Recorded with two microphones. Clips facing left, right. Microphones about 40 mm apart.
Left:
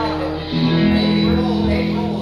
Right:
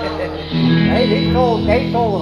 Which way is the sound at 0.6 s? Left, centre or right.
Right.